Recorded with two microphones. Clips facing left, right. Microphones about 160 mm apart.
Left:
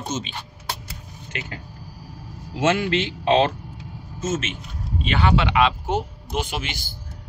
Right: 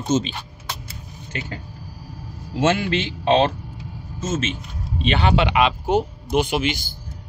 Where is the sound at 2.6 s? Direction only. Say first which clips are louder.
Right 1 dB; 35° right (ahead or behind).